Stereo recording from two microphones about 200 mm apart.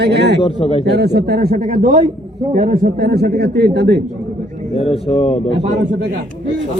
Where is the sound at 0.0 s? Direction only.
55° right (ahead or behind).